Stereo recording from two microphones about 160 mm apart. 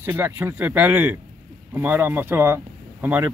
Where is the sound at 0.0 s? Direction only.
15° right (ahead or behind).